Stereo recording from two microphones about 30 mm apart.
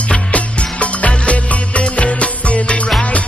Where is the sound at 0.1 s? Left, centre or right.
Left.